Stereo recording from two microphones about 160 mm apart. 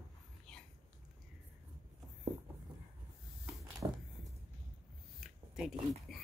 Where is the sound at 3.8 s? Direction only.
25° right (ahead or behind).